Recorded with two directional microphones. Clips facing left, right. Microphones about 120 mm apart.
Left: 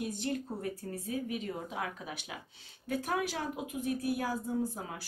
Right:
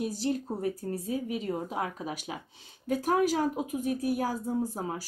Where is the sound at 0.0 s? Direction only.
35° right (ahead or behind).